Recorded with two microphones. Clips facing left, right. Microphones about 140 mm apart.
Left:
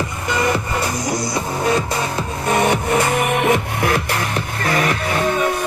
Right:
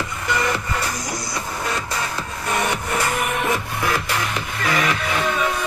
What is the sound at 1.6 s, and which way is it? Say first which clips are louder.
Music: left 8 dB; 20° left (ahead or behind).